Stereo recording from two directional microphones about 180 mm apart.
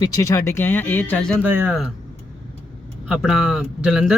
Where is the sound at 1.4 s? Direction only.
10° right (ahead or behind).